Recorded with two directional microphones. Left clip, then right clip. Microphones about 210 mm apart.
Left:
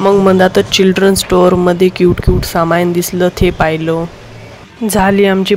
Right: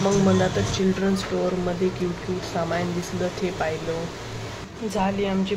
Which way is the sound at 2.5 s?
55° left (ahead or behind).